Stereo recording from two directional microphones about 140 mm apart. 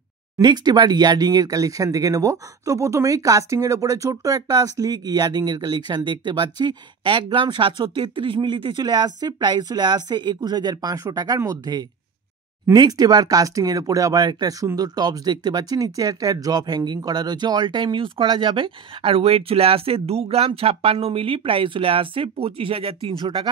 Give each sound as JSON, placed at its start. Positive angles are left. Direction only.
{"t": 0.4, "sound": "speech", "side_deg": -30}